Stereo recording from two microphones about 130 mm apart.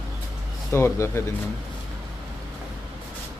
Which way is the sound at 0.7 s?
20° left (ahead or behind).